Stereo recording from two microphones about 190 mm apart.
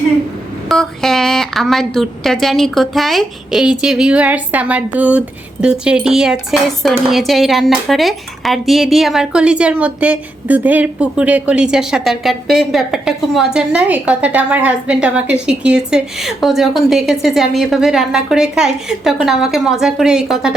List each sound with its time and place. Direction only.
0.7 s speech: centre (ahead or behind)